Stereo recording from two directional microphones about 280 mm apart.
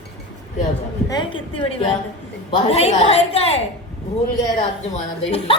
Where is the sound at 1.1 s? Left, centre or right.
Centre.